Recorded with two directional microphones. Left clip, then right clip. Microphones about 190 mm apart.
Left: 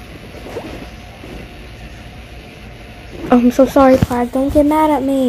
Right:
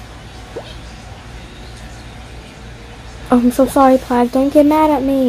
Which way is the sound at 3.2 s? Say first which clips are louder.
Left 2 dB; 10° right (ahead or behind).